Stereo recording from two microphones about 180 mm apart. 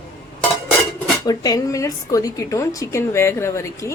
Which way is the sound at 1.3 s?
20° left (ahead or behind).